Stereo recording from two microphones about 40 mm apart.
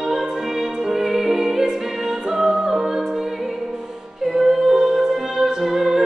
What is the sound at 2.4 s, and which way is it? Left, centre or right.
Music, centre.